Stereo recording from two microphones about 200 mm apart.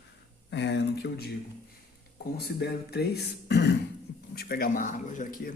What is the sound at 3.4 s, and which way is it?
Beatboxing, 55° left (ahead or behind).